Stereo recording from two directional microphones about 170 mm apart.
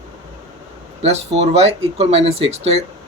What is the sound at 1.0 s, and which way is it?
Speech, 40° right (ahead or behind).